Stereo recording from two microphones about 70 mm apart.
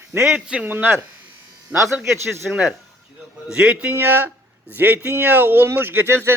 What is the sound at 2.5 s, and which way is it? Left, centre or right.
Speech, centre.